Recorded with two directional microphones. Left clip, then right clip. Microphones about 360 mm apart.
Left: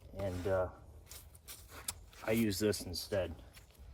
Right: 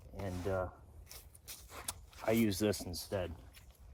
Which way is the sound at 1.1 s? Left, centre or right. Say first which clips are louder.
Right 2 dB; centre.